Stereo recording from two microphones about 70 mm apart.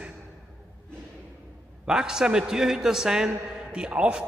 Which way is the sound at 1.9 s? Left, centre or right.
Centre.